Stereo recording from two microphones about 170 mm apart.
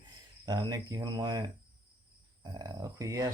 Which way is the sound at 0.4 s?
25° right (ahead or behind).